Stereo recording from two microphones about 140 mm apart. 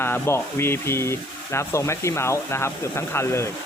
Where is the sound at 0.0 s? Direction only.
15° left (ahead or behind).